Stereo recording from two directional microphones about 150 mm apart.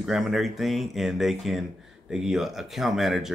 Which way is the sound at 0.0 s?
Centre (ahead or behind).